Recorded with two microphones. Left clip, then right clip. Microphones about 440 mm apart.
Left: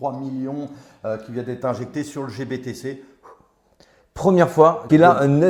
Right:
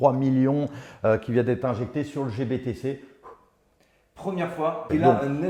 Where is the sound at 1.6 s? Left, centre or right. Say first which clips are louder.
Left 3 dB; centre.